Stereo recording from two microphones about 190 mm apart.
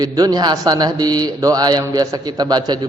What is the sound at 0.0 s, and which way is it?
Speech, 20° right (ahead or behind).